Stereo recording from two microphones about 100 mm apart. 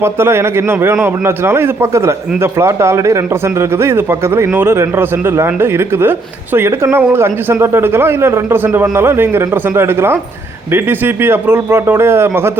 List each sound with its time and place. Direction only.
0.0 s a man's voice: 25° right (ahead or behind)